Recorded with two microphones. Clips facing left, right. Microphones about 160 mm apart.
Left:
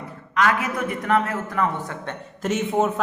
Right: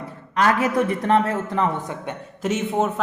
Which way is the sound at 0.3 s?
35° right (ahead or behind).